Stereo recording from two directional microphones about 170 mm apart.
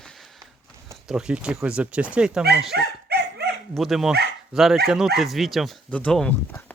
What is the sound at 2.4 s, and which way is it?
Dog, 70° right (ahead or behind).